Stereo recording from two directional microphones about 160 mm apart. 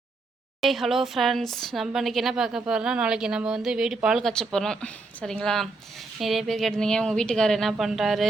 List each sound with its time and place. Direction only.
0.6 s a woman's voice: centre (ahead or behind)